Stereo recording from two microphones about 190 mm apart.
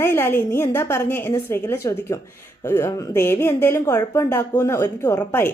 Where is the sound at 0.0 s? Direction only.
10° left (ahead or behind).